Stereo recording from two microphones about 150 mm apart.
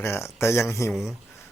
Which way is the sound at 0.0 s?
15° left (ahead or behind).